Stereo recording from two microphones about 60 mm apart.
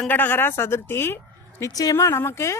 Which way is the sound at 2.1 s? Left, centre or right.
Left.